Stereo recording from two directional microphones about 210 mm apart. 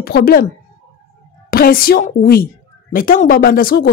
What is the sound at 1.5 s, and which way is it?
A woman's voice, 45° left (ahead or behind).